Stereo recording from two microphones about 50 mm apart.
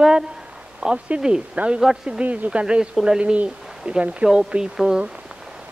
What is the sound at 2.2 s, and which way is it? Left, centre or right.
Speech, right.